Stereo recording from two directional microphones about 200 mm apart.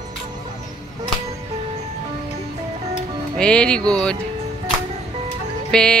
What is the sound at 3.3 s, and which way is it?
Music, 5° left (ahead or behind).